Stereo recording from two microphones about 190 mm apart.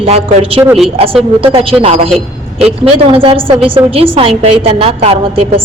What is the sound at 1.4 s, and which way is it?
A woman's voice, 30° right (ahead or behind).